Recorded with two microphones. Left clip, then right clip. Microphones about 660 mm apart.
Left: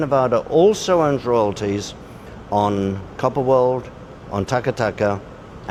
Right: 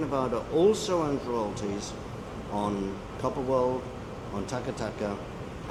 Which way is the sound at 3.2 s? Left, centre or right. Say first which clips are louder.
Left 11 dB; left.